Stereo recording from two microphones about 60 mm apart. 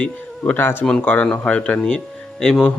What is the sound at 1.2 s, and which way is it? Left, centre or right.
Speech, left.